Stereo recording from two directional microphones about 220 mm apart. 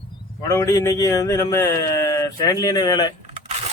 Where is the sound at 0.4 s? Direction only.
15° left (ahead or behind).